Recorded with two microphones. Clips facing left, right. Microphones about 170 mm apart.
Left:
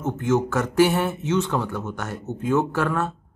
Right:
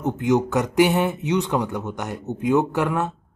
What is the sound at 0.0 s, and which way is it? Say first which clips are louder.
A man's voice: right 2 dB; 15° right (ahead or behind).